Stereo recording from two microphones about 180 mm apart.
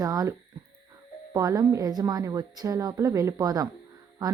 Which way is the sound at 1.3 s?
20° right (ahead or behind).